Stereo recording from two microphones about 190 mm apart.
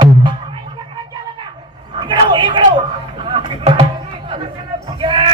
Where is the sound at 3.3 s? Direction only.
30° right (ahead or behind).